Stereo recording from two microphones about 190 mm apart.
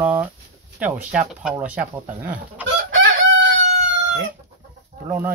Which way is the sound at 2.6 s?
85° right.